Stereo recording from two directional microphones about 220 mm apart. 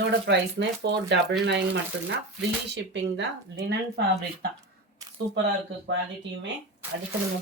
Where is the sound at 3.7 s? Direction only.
50° right (ahead or behind).